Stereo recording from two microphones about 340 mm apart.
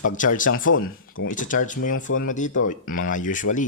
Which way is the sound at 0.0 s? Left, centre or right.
Left.